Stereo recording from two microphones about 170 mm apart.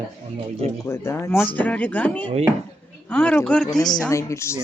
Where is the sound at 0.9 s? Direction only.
15° left (ahead or behind).